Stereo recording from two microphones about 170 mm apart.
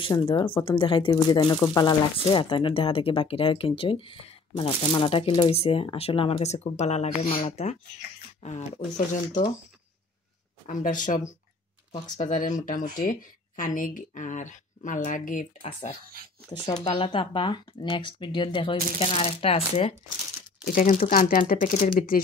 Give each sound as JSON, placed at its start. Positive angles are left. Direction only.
{"t": 0.0, "sound": "speech", "side_deg": 30}
{"t": 10.7, "sound": "speech", "side_deg": 50}
{"t": 16.5, "sound": "speech", "side_deg": 25}
{"t": 20.6, "sound": "speech", "side_deg": 50}